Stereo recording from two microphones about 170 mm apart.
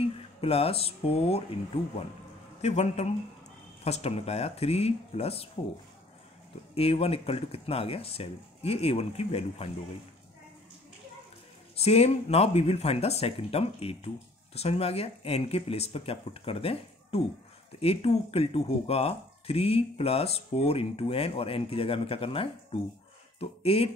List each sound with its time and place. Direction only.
0.0 s speech: 35° left (ahead or behind)
2.6 s speech: 40° left (ahead or behind)
6.7 s speech: 35° left (ahead or behind)
11.7 s speech: 40° left (ahead or behind)